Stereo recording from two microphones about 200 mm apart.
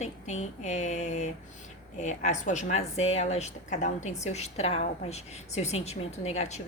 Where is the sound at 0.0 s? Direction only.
35° left (ahead or behind).